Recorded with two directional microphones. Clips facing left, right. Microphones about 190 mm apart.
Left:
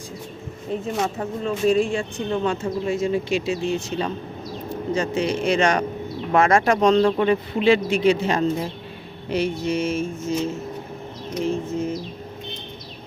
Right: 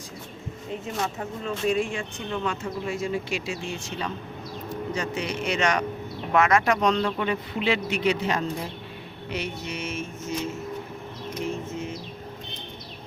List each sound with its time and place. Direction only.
1.5 s speech: 35° left (ahead or behind)